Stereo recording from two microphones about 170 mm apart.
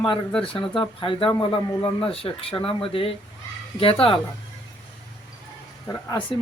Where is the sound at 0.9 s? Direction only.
30° left (ahead or behind).